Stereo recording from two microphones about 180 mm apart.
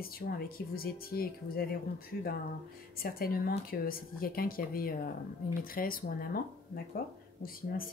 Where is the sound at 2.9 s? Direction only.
55° left (ahead or behind).